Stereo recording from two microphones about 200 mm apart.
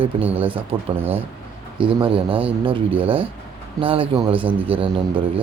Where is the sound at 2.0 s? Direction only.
25° right (ahead or behind).